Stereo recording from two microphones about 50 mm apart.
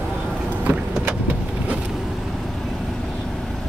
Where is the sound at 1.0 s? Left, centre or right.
Right.